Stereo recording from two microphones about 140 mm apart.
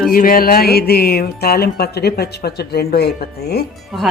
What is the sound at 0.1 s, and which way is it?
Music, 90° left.